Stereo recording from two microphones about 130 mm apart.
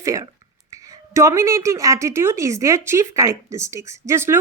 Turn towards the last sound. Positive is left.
turn(degrees=-20)  # may be behind; listen again after turning